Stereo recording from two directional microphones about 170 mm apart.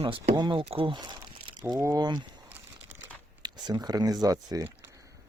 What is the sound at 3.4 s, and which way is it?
Speech, 25° right (ahead or behind).